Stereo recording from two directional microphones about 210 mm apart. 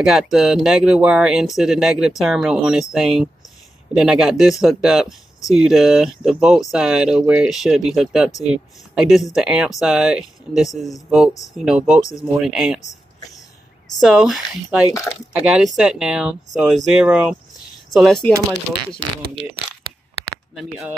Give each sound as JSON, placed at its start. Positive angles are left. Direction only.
{"t": 0.0, "sound": "speech", "side_deg": 0}
{"t": 13.8, "sound": "speech", "side_deg": 0}
{"t": 15.1, "sound": "speech", "side_deg": 10}
{"t": 15.4, "sound": "speech", "side_deg": 0}
{"t": 20.5, "sound": "speech", "side_deg": 0}